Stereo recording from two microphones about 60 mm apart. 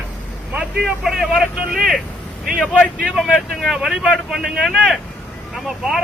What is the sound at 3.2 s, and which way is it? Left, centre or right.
Speech, centre.